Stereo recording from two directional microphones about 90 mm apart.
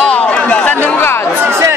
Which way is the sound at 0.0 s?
15° left (ahead or behind).